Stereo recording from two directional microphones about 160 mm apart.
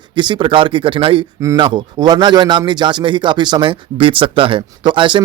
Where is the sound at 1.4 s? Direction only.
20° right (ahead or behind).